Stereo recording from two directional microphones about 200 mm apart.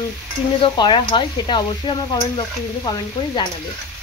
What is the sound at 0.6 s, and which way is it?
Speech, 25° left (ahead or behind).